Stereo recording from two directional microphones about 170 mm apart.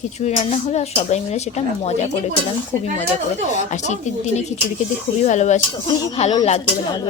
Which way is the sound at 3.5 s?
45° left (ahead or behind).